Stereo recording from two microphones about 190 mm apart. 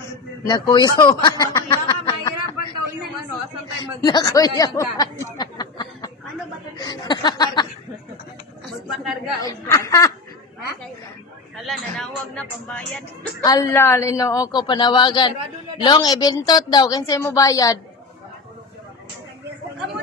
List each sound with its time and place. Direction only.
0.5 s a woman's voice: 20° left (ahead or behind)
4.0 s a woman's voice: 20° left (ahead or behind)
8.8 s speech: centre (ahead or behind)
9.4 s a woman's voice: 15° left (ahead or behind)
11.6 s speech: centre (ahead or behind)
13.4 s a woman's voice: 20° left (ahead or behind)